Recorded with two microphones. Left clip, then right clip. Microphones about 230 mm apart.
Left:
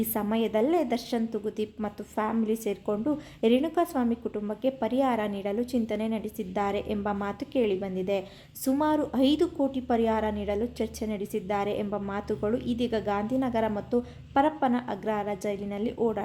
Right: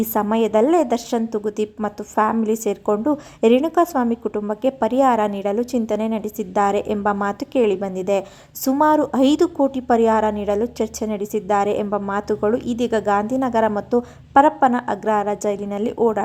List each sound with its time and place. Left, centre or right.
0.0 s a woman's voice: centre